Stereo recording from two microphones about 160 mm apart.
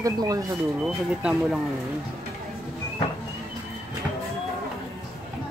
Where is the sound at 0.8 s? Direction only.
5° right (ahead or behind).